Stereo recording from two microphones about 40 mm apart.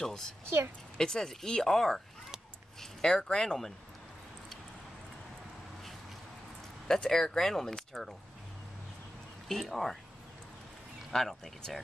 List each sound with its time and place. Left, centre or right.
0.0 s speech: centre
6.9 s speech: centre
9.5 s speech: centre
11.1 s speech: centre